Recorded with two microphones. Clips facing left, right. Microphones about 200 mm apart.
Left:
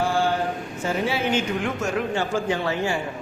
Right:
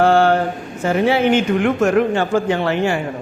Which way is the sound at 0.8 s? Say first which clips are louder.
Right 9 dB; 65° right (ahead or behind).